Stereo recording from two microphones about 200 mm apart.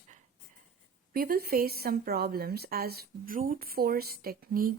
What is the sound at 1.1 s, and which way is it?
Speech, 45° right (ahead or behind).